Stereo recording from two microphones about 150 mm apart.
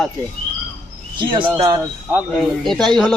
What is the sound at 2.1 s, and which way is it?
A woman's voice, 5° right (ahead or behind).